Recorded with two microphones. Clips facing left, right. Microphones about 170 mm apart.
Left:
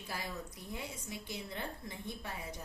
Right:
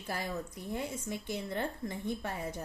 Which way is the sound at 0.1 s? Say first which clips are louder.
Right 6 dB; 50° right (ahead or behind).